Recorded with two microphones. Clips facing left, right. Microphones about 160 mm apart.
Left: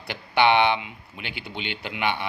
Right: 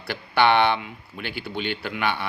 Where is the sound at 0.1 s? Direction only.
15° left (ahead or behind).